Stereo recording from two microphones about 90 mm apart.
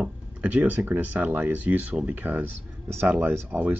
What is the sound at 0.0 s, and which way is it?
Speech, 15° right (ahead or behind).